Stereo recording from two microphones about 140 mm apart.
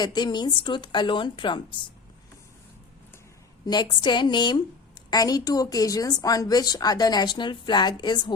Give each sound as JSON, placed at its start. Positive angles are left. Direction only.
{"t": 0.0, "sound": "a woman's voice", "side_deg": 30}
{"t": 3.7, "sound": "a woman's voice", "side_deg": 30}